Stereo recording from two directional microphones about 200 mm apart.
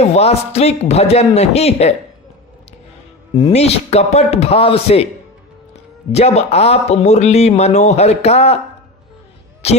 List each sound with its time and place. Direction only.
0.0 s speech: 30° left (ahead or behind)
3.3 s speech: 30° left (ahead or behind)
9.6 s speech: 30° left (ahead or behind)